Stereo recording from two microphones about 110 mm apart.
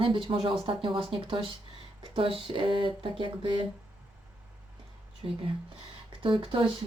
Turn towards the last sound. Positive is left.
turn(degrees=-50)  # may be behind; listen again after turning